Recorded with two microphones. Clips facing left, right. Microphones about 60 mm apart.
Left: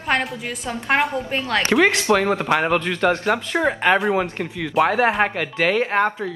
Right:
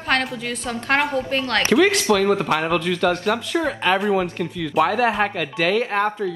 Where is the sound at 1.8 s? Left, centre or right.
Left.